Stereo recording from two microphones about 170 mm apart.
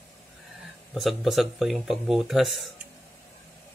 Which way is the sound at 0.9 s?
Centre (ahead or behind).